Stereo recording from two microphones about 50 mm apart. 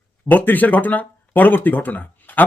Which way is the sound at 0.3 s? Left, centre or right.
Left.